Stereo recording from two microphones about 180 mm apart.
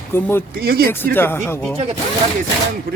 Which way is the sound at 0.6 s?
60° right (ahead or behind).